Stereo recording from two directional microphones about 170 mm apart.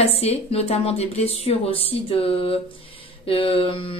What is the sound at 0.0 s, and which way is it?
A woman's voice, 35° left (ahead or behind).